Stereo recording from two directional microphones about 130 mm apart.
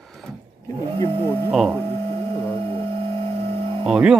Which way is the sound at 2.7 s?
45° right (ahead or behind).